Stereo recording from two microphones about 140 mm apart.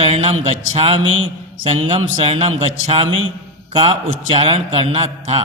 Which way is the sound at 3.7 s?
40° right (ahead or behind).